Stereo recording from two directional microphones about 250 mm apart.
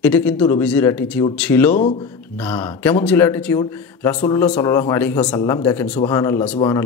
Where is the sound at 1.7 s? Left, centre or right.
Left.